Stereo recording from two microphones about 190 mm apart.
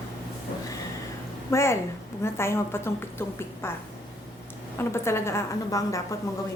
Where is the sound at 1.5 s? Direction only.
15° left (ahead or behind).